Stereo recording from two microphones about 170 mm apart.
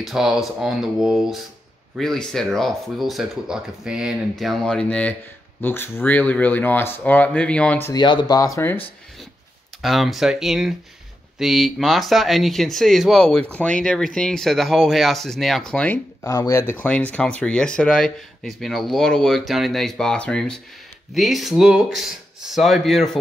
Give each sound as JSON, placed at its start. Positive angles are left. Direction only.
{"t": 0.0, "sound": "speech", "side_deg": 0}
{"t": 7.9, "sound": "speech", "side_deg": 25}
{"t": 9.8, "sound": "speech", "side_deg": 0}
{"t": 16.3, "sound": "speech", "side_deg": 20}